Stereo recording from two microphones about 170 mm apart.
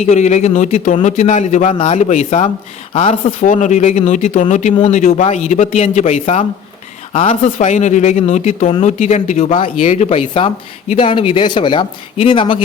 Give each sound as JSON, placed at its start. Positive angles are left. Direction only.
{"t": 0.0, "sound": "speech", "side_deg": 45}